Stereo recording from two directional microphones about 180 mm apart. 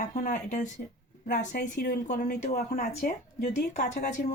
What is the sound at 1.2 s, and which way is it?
Speech, 65° left (ahead or behind).